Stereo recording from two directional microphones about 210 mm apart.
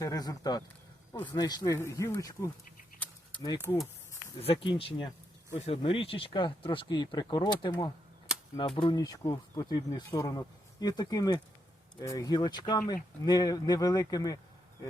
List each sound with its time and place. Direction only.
0.0 s speech: 15° left (ahead or behind)
4.4 s speech: 25° left (ahead or behind)